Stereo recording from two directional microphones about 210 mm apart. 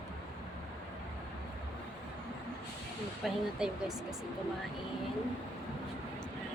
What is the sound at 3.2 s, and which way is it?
Speech, centre (ahead or behind).